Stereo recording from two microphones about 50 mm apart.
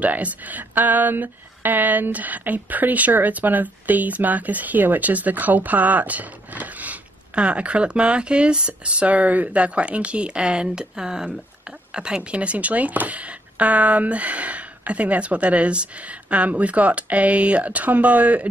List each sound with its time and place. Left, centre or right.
0.0 s speech: right